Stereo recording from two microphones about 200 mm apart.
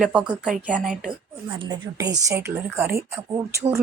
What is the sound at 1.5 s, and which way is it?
A woman's voice, 20° right (ahead or behind).